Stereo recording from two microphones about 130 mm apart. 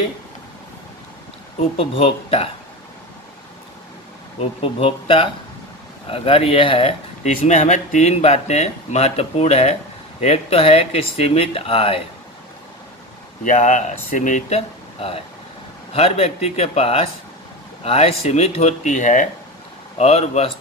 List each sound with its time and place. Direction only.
1.6 s speech: 45° left (ahead or behind)
4.4 s speech: 45° left (ahead or behind)
7.2 s speech: 65° left (ahead or behind); by 12.0 s 45° left (ahead or behind)
13.4 s speech: 70° left (ahead or behind)
15.0 s speech: 50° left (ahead or behind); by 19.2 s 70° left (ahead or behind)
20.0 s speech: 55° left (ahead or behind)